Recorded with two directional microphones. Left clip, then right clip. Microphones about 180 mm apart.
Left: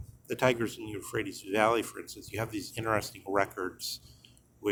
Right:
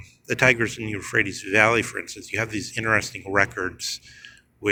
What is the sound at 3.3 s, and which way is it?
Speech, 15° right (ahead or behind).